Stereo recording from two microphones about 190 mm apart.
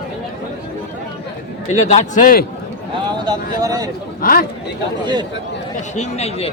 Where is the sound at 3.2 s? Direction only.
20° right (ahead or behind).